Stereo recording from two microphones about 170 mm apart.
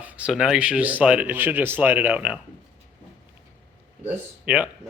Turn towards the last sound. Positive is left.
turn(degrees=-5)  # may be behind; listen again after turning